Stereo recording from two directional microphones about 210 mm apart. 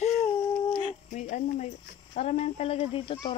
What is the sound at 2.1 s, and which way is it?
Speech, 30° left (ahead or behind).